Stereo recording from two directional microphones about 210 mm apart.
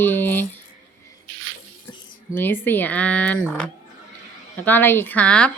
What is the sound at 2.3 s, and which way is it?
A woman's voice, 10° left (ahead or behind).